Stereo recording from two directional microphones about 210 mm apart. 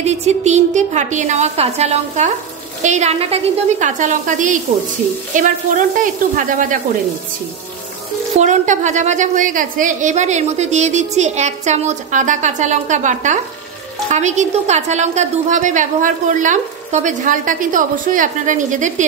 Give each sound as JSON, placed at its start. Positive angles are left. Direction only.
{"t": 0.0, "sound": "a woman's voice", "side_deg": -30}
{"t": 8.4, "sound": "a woman's voice", "side_deg": -35}